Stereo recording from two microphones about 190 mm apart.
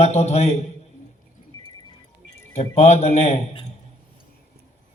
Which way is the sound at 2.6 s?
35° left (ahead or behind).